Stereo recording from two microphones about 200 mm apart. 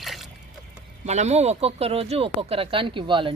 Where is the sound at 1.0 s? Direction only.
35° right (ahead or behind).